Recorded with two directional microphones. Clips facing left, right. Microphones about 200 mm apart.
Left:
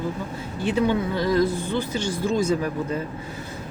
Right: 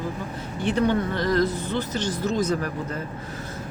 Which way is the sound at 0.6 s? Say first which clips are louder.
Even; 10° left (ahead or behind).